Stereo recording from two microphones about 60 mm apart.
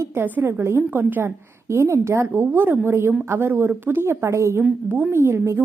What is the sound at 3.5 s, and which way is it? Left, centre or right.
Speech, right.